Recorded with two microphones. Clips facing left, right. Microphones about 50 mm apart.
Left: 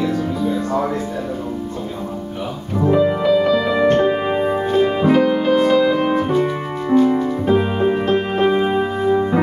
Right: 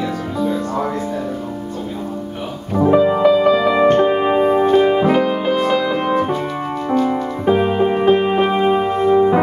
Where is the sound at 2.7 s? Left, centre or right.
Centre.